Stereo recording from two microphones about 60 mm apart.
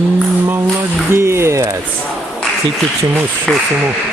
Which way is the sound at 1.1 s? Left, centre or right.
Right.